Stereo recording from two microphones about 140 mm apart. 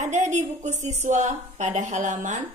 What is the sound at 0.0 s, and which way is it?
A woman's voice, 60° right (ahead or behind).